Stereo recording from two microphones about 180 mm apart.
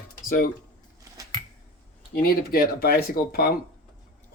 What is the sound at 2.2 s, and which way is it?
Speech, 55° left (ahead or behind).